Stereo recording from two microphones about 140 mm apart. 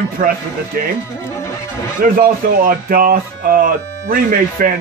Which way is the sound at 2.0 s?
85° right.